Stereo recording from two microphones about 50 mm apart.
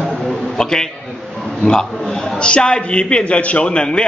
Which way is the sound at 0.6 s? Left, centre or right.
Centre.